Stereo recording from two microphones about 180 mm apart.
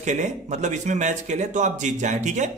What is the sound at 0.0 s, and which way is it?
Speech, 40° right (ahead or behind).